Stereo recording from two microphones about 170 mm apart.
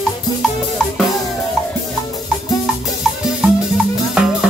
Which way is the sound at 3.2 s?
Centre (ahead or behind).